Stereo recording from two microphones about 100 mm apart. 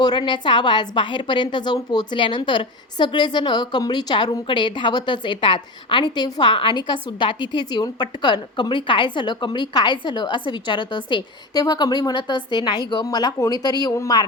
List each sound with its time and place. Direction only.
0.0 s a woman's voice: 50° left (ahead or behind)